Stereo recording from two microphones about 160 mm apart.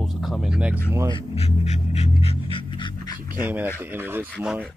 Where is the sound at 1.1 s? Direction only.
40° left (ahead or behind).